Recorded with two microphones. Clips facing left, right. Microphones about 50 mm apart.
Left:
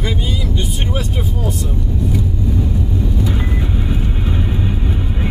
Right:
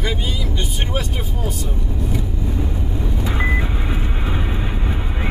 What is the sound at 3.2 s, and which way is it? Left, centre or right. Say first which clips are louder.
Vehicle: left 1 dB; right.